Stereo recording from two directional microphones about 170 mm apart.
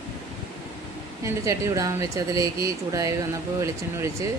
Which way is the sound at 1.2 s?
20° right (ahead or behind).